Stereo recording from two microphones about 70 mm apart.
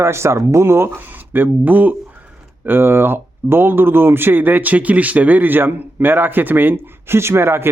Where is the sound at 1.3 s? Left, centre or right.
Right.